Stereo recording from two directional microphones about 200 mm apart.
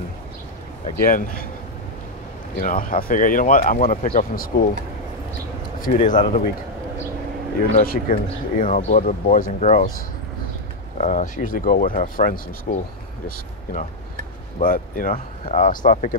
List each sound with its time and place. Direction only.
1.0 s speech: 45° left (ahead or behind)
2.5 s speech: 45° left (ahead or behind)
5.8 s speech: 40° left (ahead or behind)
7.7 s speech: 40° left (ahead or behind)
11.0 s speech: 35° left (ahead or behind)
14.6 s speech: 45° left (ahead or behind)